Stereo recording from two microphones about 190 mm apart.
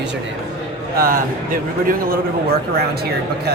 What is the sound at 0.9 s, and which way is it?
Speech, 50° right (ahead or behind).